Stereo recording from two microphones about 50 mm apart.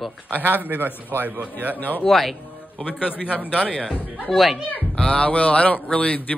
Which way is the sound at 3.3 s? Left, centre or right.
Right.